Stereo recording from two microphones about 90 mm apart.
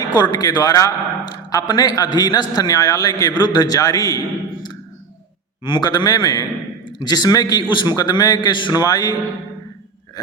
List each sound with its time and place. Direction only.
0.0 s a man's voice: 50° left (ahead or behind)
5.6 s a man's voice: 55° left (ahead or behind)
8.7 s a man's voice: 45° left (ahead or behind)